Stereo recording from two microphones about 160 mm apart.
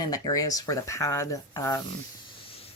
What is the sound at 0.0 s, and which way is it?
Speech, 25° left (ahead or behind).